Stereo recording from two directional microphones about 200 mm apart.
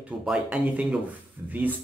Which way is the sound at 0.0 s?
5° right (ahead or behind).